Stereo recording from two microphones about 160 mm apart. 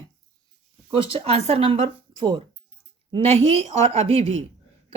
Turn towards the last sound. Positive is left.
turn(degrees=-40)  # may be behind; listen again after turning